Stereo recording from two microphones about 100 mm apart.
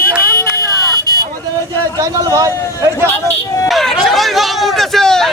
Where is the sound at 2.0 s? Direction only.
35° right (ahead or behind).